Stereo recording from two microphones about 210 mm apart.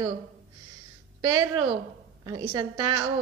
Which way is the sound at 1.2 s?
20° right (ahead or behind).